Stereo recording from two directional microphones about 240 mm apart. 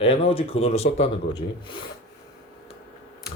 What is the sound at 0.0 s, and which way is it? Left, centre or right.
Speech, left.